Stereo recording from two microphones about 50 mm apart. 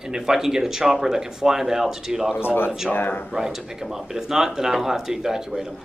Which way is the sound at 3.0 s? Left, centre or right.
Left.